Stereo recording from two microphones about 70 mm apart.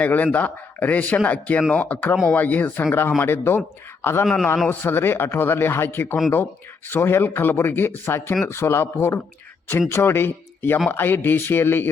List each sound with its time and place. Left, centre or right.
0.0 s a man's voice: left
2.8 s speech: left